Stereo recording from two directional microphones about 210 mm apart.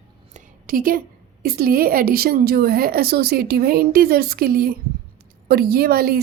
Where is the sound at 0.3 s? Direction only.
40° right (ahead or behind).